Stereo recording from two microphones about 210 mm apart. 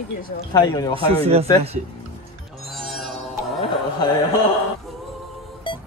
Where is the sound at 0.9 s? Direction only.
30° right (ahead or behind).